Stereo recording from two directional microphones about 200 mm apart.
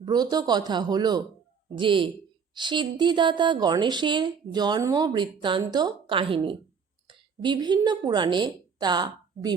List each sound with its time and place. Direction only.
0.0 s a woman's voice: 20° right (ahead or behind)